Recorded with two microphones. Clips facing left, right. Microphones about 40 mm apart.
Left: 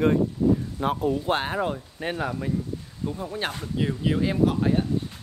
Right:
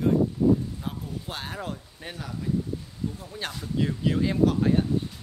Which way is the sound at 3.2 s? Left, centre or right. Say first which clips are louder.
Left 5 dB; left.